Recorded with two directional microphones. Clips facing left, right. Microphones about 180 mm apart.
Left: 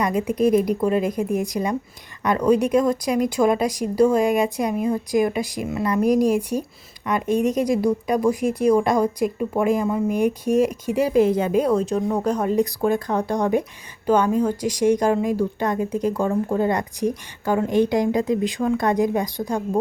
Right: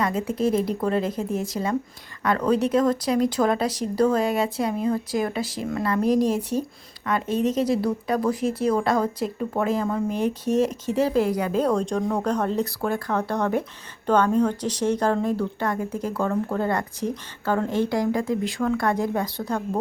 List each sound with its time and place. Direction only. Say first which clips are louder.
0.0 s speech: left 4 dB; 15° left (ahead or behind)
11.6 s speech: left 2 dB; 5° left (ahead or behind)